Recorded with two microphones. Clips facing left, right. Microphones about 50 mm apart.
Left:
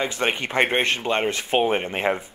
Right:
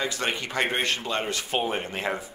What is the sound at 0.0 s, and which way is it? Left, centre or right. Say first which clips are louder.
Speech: left 4 dB; left.